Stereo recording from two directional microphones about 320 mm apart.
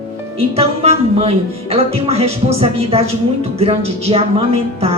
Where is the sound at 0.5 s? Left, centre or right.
Centre.